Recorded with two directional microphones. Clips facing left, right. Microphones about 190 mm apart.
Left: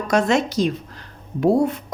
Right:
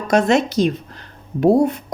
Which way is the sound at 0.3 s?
20° right (ahead or behind).